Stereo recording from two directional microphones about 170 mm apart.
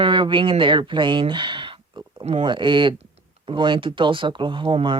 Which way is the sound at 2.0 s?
25° right (ahead or behind).